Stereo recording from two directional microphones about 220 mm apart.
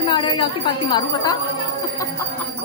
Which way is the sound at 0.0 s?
20° left (ahead or behind).